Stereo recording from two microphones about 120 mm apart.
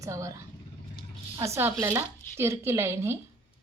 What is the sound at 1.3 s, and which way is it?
Speech, 25° right (ahead or behind).